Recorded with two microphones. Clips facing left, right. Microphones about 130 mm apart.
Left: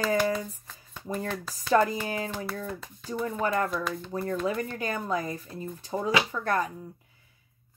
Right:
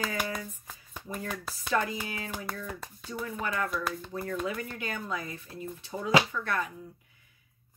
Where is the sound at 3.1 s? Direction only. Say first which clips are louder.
Left 6 dB; 40° left (ahead or behind).